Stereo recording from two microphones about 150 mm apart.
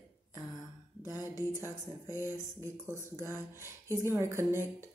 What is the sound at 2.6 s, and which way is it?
A woman's voice, 20° right (ahead or behind).